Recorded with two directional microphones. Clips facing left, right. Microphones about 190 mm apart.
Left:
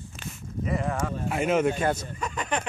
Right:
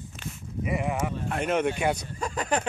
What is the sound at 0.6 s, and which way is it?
Speech, 15° right (ahead or behind).